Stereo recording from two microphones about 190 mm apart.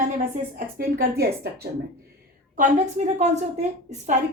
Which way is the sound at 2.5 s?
40° right (ahead or behind).